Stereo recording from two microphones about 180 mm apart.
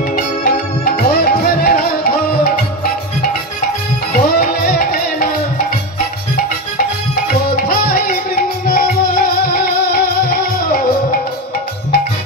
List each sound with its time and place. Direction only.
0.1 s music: 55° left (ahead or behind)
7.2 s music: 55° left (ahead or behind)